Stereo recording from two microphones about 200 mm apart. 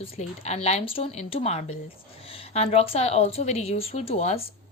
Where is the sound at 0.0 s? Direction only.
35° left (ahead or behind).